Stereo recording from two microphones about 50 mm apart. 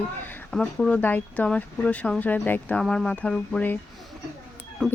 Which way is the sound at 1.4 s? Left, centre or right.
Left.